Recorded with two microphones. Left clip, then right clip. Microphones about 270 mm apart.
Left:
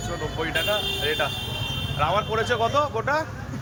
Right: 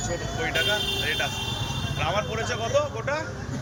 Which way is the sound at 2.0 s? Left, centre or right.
Centre.